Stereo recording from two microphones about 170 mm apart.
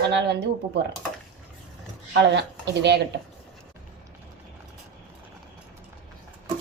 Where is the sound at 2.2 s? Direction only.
90° right.